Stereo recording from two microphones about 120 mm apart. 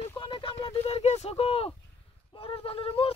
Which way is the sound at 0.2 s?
45° left (ahead or behind).